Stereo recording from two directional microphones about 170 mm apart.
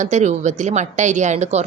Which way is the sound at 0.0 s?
45° right (ahead or behind).